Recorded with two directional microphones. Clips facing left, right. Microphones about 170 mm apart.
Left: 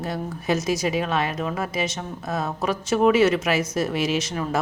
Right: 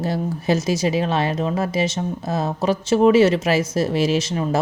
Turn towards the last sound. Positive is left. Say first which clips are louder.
# right 4 dB
turn(degrees=-30)  # may be behind; listen again after turning